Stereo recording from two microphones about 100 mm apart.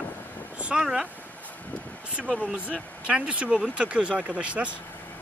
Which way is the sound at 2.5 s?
15° right (ahead or behind).